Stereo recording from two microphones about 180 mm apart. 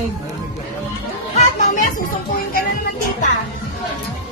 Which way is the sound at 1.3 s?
40° left (ahead or behind).